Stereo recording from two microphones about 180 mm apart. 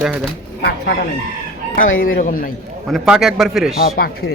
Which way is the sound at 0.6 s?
65° left (ahead or behind).